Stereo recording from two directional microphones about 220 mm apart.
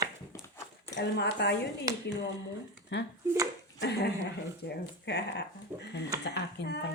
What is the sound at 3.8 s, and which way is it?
Dog, 50° left (ahead or behind).